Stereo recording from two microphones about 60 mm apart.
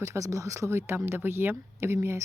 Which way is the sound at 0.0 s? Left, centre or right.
Right.